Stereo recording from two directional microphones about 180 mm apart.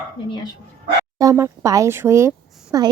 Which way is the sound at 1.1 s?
15° right (ahead or behind).